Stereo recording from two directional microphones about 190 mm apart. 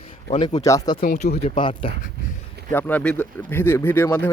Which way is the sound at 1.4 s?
30° left (ahead or behind).